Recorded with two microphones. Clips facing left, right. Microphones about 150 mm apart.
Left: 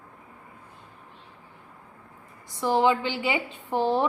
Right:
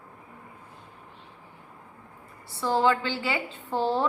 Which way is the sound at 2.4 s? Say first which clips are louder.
Left 2 dB; 15° left (ahead or behind).